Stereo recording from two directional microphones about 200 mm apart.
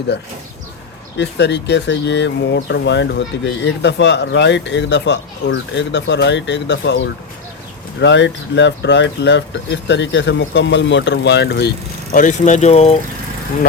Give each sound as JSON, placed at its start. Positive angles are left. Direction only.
{"t": 0.1, "sound": "speech", "side_deg": 55}
{"t": 12.1, "sound": "speech", "side_deg": 40}